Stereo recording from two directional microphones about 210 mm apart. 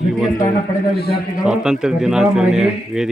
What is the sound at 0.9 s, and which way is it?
Speech, 50° left (ahead or behind).